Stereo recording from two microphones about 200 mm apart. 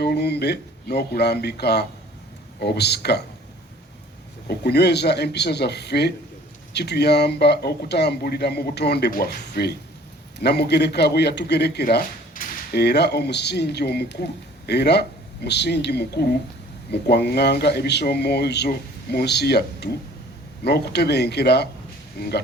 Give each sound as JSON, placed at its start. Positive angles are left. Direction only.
{"t": 0.0, "sound": "a man's voice", "side_deg": 55}
{"t": 4.4, "sound": "a man's voice", "side_deg": 55}